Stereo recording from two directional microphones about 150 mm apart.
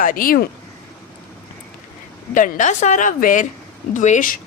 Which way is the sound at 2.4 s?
60° left (ahead or behind).